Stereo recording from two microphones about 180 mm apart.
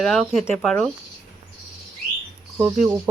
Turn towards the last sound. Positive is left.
turn(degrees=-10)  # may be behind; listen again after turning